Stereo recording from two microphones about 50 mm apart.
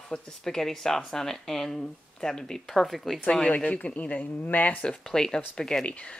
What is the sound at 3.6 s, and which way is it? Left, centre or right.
Speech, left.